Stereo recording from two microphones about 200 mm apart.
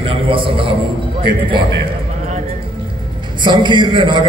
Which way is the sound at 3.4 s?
25° right (ahead or behind).